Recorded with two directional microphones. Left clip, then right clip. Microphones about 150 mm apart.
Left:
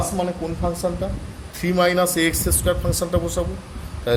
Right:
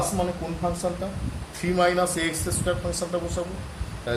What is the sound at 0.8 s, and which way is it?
Speech, 40° left (ahead or behind).